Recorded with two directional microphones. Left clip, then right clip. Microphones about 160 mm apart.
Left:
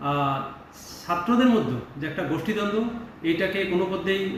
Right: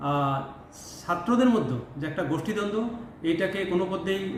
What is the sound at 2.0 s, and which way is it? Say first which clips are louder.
Mantra: left 1 dB; 15° right (ahead or behind).